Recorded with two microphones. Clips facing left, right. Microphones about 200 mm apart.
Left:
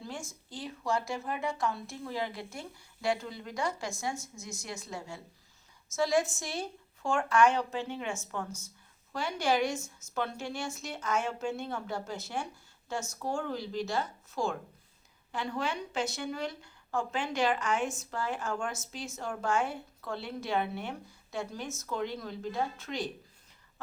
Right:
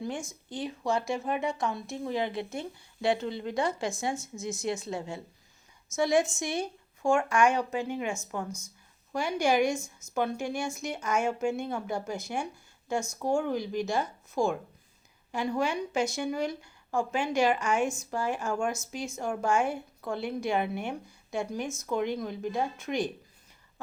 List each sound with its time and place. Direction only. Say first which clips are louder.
0.0 s speech: right 6 dB; 15° right (ahead or behind)
9.7 s a woman's voice: right 3 dB; 5° left (ahead or behind)
10.2 s speech: right 5 dB; 10° right (ahead or behind)